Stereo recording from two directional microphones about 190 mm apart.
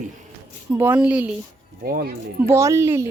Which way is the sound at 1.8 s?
50° right (ahead or behind).